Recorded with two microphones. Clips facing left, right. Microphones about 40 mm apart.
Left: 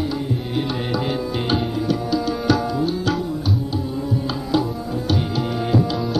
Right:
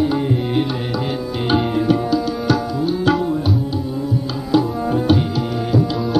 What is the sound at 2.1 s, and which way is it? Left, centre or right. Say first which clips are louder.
Tabla: right 2 dB; centre.